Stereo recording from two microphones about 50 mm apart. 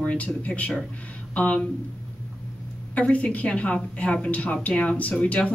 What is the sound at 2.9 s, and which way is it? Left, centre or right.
Speech, left.